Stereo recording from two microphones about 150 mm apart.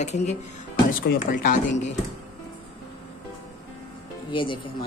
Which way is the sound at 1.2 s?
65° left (ahead or behind).